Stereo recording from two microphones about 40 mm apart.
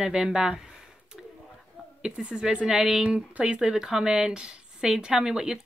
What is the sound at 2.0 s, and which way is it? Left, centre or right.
A woman's voice, centre.